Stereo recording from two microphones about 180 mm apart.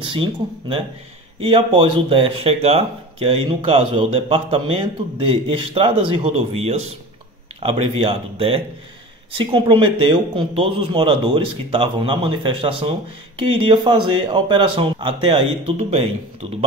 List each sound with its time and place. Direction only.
0.1 s speech: 30° right (ahead or behind)